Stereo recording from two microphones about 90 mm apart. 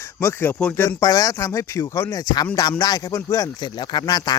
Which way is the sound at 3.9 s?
50° left (ahead or behind).